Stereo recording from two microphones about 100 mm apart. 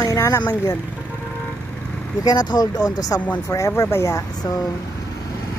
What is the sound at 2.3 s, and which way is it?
Speech, 45° left (ahead or behind).